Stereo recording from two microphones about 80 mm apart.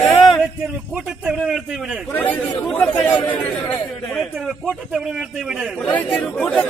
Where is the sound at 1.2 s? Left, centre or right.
Centre.